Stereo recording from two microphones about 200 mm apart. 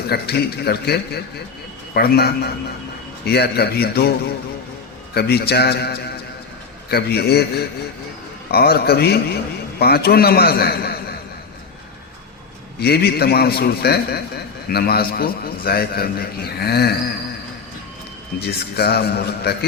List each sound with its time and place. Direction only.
0.1 s a man's voice: 55° left (ahead or behind)
5.1 s a man's voice: 55° left (ahead or behind)
12.8 s a man's voice: 55° left (ahead or behind)
18.3 s a man's voice: 55° left (ahead or behind)